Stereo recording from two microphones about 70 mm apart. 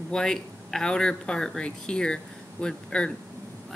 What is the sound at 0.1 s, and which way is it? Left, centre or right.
Speech, centre.